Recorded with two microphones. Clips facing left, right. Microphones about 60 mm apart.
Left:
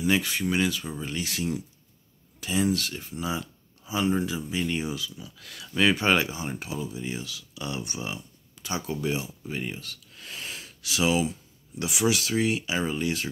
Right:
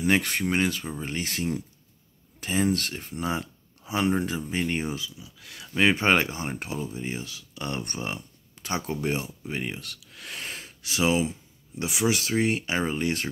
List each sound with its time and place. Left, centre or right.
0.0 s speech: right
5.1 s speech: centre
5.8 s speech: right
7.6 s speech: right